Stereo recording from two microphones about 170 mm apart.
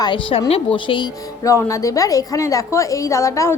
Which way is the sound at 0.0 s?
30° left (ahead or behind).